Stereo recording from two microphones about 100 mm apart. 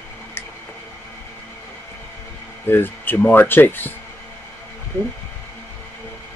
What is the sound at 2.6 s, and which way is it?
Speech, 20° left (ahead or behind).